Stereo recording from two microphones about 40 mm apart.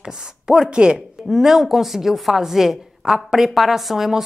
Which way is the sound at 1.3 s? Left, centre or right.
Centre.